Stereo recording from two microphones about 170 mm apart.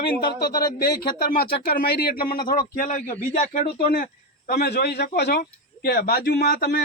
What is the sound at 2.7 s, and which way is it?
Speech, 45° left (ahead or behind).